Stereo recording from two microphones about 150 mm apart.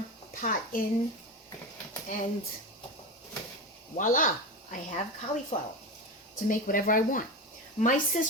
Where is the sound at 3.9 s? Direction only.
65° left (ahead or behind).